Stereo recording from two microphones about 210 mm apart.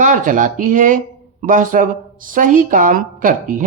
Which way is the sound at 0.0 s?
35° right (ahead or behind).